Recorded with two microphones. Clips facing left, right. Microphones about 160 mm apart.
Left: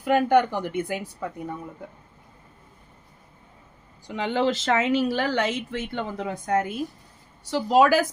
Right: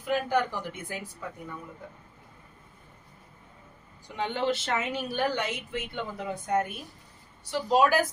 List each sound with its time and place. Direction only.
0.0 s a woman's voice: 65° left (ahead or behind)
4.0 s speech: 90° left